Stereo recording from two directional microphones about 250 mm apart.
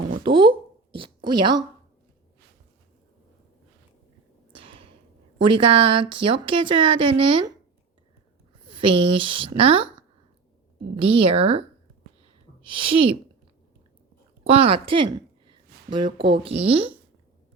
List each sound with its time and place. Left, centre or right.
0.2 s a woman's voice: centre
4.5 s a sound: right
5.4 s a woman's voice: right
8.6 s a woman's voice: centre
10.9 s a woman's voice: right
12.7 s a woman's voice: right
14.4 s a sound: right
16.1 s a woman's voice: centre